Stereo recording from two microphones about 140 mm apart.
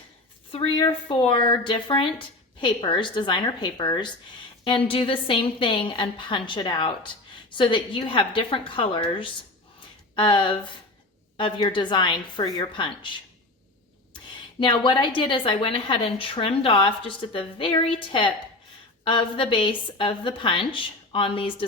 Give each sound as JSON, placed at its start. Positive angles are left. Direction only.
{"t": 0.5, "sound": "a woman's voice", "side_deg": 40}
{"t": 14.6, "sound": "a woman's voice", "side_deg": 35}